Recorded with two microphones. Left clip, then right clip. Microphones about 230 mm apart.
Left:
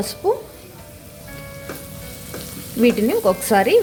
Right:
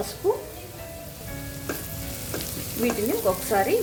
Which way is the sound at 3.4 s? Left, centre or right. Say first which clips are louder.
Left 7 dB; left.